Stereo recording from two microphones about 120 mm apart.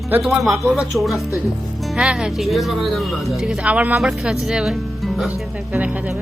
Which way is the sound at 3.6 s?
10° right (ahead or behind).